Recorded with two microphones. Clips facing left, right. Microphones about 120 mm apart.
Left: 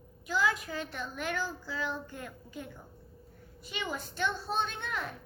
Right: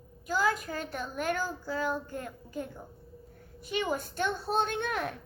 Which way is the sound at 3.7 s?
50° right (ahead or behind).